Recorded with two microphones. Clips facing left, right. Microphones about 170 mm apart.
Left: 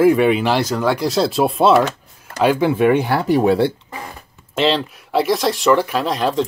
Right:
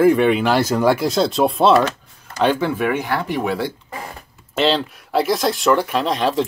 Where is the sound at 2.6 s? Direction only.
20° left (ahead or behind).